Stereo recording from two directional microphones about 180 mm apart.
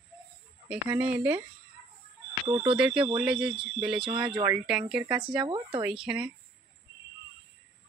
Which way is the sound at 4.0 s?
30° right (ahead or behind).